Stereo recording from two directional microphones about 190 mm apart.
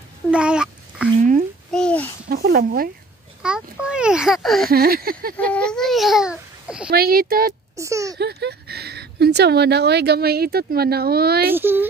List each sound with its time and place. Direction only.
0.3 s a sound: 5° right (ahead or behind)
1.7 s babbling: 5° left (ahead or behind)
2.2 s speech: 55° right (ahead or behind)
3.4 s speech: 5° right (ahead or behind)
4.6 s speech: 50° right (ahead or behind)
5.5 s speech: 5° left (ahead or behind)
6.9 s speech: 50° right (ahead or behind)
7.7 s speech: 15° right (ahead or behind)
8.2 s speech: 60° right (ahead or behind)
11.5 s speech: 10° right (ahead or behind)